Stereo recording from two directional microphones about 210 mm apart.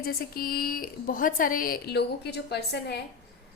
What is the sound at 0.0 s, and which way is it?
A woman's voice, 45° left (ahead or behind).